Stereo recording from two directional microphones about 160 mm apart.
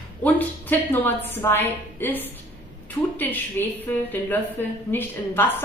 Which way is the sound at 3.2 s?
10° left (ahead or behind).